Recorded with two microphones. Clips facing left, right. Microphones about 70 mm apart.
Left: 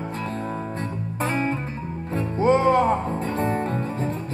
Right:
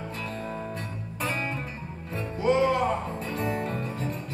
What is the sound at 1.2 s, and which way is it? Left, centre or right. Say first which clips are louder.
Music: left 6 dB; left.